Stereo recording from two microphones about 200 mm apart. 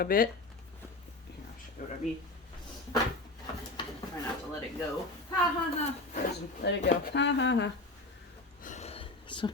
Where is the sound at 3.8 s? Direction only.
25° left (ahead or behind).